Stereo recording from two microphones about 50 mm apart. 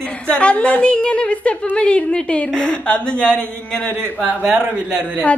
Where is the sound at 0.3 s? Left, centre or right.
Left.